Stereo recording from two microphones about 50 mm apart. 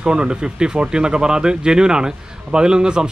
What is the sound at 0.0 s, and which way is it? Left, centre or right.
Speech, centre.